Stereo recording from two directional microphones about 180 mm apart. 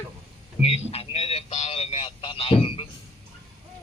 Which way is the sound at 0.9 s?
35° left (ahead or behind).